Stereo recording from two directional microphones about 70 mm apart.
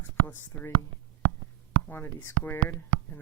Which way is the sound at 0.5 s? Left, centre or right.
Left.